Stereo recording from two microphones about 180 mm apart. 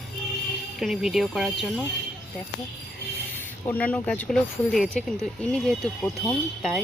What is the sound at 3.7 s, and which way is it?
Speech, 10° left (ahead or behind).